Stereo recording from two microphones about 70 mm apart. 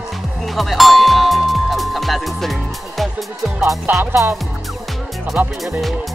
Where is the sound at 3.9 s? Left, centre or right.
Right.